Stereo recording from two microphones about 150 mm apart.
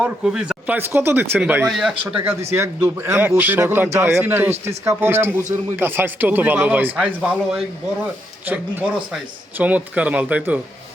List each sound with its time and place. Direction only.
0.0 s speech: 5° right (ahead or behind)
9.6 s speech: 10° right (ahead or behind)